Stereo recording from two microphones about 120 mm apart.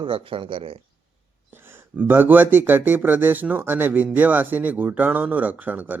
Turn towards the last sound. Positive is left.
turn(degrees=-15)  # may be behind; listen again after turning